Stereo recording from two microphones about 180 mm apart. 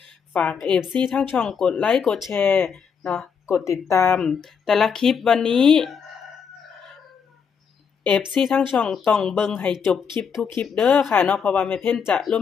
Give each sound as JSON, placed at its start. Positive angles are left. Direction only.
{"t": 0.3, "sound": "speech", "side_deg": 5}
{"t": 2.3, "sound": "speech", "side_deg": 10}
{"t": 3.6, "sound": "speech", "side_deg": 15}
{"t": 4.2, "sound": "speech", "side_deg": 5}
{"t": 8.0, "sound": "speech", "side_deg": 0}